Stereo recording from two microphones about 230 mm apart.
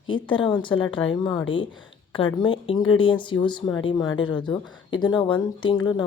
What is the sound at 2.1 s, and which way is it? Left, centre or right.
Speech, left.